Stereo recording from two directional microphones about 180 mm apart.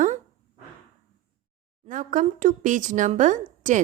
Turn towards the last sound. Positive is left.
turn(degrees=-45)  # may be behind; listen again after turning